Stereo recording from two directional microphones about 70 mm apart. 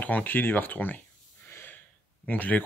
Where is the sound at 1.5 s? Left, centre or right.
Left.